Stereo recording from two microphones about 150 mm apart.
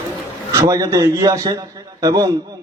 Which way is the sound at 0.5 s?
25° right (ahead or behind).